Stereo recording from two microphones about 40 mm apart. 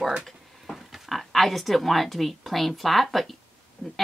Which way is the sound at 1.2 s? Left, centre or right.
Centre.